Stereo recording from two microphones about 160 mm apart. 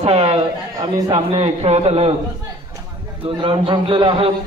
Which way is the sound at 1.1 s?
35° right (ahead or behind).